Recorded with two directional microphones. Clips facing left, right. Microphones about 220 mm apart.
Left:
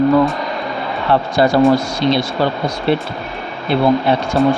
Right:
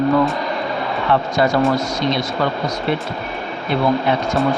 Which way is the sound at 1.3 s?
30° left (ahead or behind).